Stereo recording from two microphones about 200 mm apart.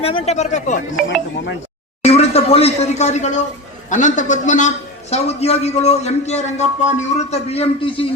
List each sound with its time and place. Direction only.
0.0 s a man's voice: 30° left (ahead or behind)
2.0 s a man's voice: 30° left (ahead or behind)